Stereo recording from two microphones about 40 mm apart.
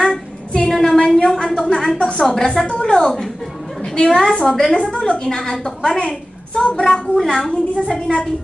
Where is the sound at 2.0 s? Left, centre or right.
Left.